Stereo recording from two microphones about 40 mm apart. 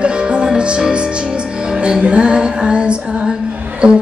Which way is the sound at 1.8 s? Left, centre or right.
Right.